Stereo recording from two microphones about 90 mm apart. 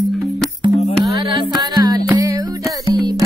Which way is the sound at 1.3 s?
50° right (ahead or behind).